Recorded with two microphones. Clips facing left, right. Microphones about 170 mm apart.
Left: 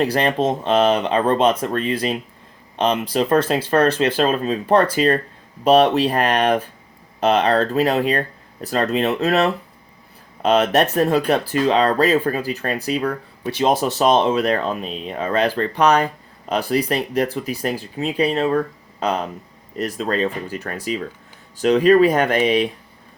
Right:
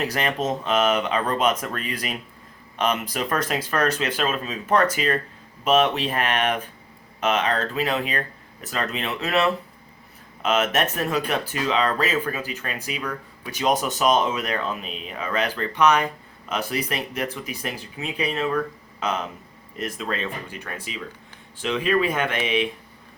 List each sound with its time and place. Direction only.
0.0 s speech: 35° left (ahead or behind)